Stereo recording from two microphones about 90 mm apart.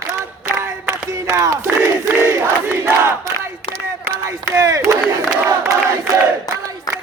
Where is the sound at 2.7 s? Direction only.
25° right (ahead or behind).